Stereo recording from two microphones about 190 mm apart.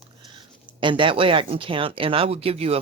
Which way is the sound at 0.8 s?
25° right (ahead or behind).